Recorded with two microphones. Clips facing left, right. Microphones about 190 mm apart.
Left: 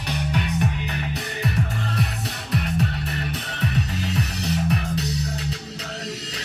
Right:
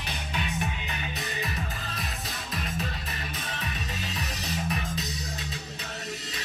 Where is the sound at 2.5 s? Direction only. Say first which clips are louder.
Left 10 dB; 65° left (ahead or behind).